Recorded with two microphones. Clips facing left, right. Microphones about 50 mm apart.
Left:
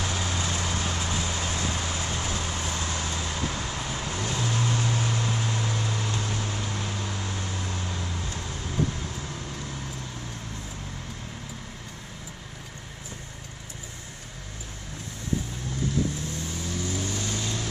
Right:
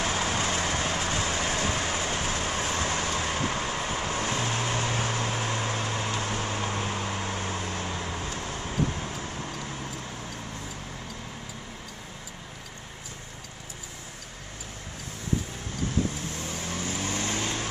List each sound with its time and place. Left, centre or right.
0.0 s vehicle: right
16.6 s vehicle: right